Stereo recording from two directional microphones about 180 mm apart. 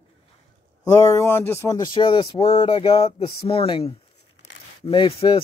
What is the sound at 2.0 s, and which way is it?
Speech, 30° left (ahead or behind).